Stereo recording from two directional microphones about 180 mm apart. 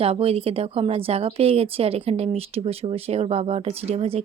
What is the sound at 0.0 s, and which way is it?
Speech, 35° right (ahead or behind).